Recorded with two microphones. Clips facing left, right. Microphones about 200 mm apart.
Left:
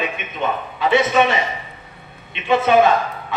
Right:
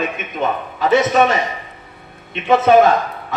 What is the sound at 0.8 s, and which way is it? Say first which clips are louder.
A man's voice: right 2 dB; 40° right (ahead or behind).